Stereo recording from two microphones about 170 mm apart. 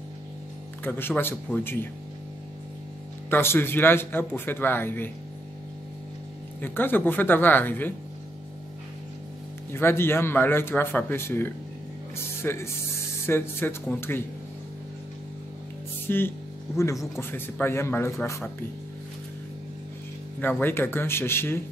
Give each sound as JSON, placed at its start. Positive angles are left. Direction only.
{"t": 0.8, "sound": "speech", "side_deg": 10}
{"t": 3.3, "sound": "speech", "side_deg": 15}
{"t": 6.6, "sound": "speech", "side_deg": 10}
{"t": 9.7, "sound": "speech", "side_deg": 15}
{"t": 16.1, "sound": "speech", "side_deg": 10}
{"t": 20.3, "sound": "speech", "side_deg": 10}